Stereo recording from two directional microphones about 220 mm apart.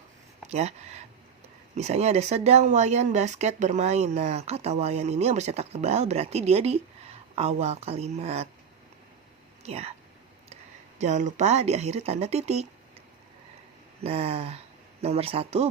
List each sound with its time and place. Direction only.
0.4 s speech: 30° right (ahead or behind)
9.6 s speech: 30° right (ahead or behind)
14.0 s speech: 25° right (ahead or behind)